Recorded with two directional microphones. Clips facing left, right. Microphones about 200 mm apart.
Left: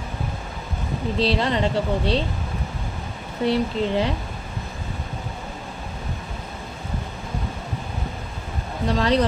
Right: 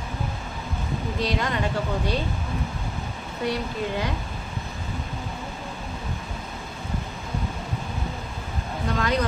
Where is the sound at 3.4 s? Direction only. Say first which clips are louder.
Left 6 dB; 25° left (ahead or behind).